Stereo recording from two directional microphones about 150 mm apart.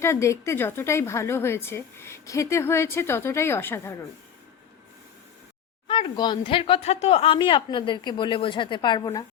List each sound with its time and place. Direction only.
0.0 s a woman's voice: 20° left (ahead or behind)
5.9 s speech: 30° left (ahead or behind)